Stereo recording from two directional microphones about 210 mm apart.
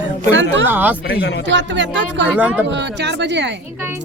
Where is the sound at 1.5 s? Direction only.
60° right (ahead or behind).